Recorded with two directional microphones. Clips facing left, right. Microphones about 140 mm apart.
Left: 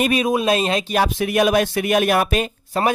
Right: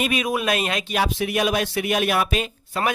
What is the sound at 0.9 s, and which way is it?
Speech, 50° left (ahead or behind).